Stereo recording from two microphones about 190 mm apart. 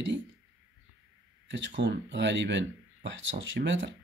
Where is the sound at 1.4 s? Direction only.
80° right.